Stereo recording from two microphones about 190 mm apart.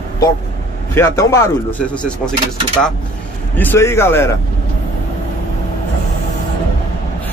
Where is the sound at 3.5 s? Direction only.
10° left (ahead or behind).